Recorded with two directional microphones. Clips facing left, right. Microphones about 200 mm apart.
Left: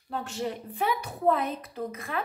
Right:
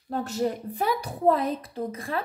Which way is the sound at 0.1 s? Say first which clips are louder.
Right 5 dB; 40° right (ahead or behind).